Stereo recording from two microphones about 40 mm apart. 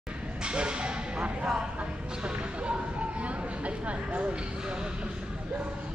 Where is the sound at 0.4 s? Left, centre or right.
Right.